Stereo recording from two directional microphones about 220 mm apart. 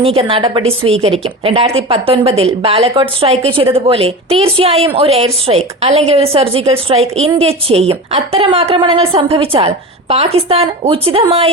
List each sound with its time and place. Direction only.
0.0 s a woman's voice: 25° right (ahead or behind)